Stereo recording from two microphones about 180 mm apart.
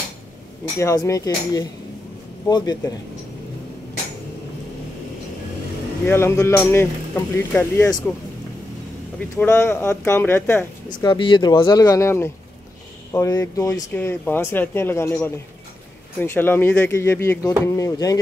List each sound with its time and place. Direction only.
0.7 s speech: 15° left (ahead or behind)
6.0 s speech: 15° left (ahead or behind)
9.4 s speech: 10° left (ahead or behind)
11.1 s speech: 25° left (ahead or behind)